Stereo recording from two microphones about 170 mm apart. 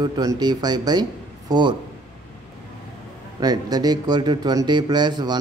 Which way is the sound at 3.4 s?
20° right (ahead or behind).